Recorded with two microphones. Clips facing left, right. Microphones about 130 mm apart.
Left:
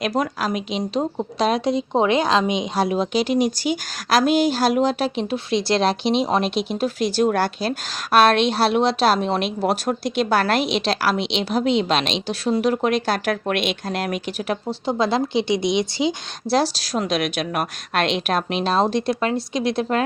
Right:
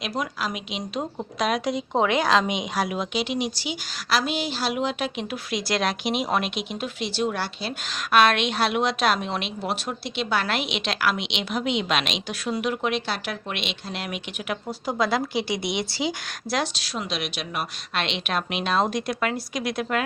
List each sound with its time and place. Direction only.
0.0 s speech: 45° left (ahead or behind); by 16.1 s 20° left (ahead or behind)
16.5 s speech: 35° left (ahead or behind)